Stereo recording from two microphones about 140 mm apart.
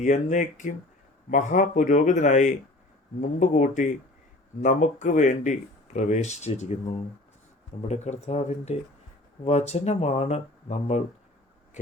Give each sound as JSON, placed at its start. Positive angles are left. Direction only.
{"t": 0.0, "sound": "speech", "side_deg": 60}